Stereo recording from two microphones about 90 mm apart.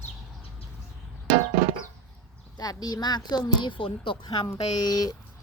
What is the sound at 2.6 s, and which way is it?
Speech, 45° left (ahead or behind).